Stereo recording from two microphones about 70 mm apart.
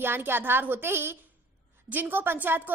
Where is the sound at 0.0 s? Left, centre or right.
Right.